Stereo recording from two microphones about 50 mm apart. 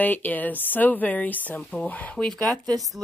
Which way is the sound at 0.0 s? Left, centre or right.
Left.